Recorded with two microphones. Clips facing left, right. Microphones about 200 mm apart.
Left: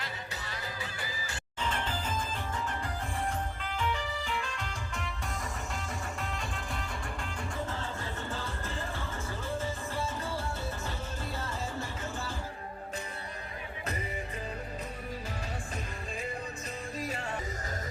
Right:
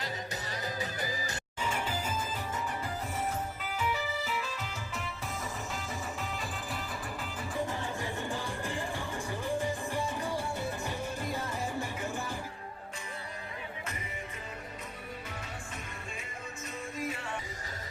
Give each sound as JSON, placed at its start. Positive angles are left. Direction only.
{"t": 0.5, "sound": "music", "side_deg": -40}
{"t": 1.6, "sound": "music", "side_deg": -10}
{"t": 3.6, "sound": "music", "side_deg": -5}
{"t": 7.7, "sound": "music", "side_deg": -15}
{"t": 17.0, "sound": "music", "side_deg": 35}